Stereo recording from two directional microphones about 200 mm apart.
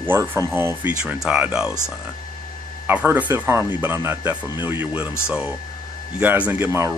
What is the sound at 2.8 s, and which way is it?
Speech, 10° right (ahead or behind).